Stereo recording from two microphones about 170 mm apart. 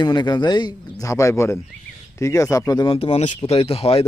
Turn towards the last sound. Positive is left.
turn(degrees=35)  # may be behind; listen again after turning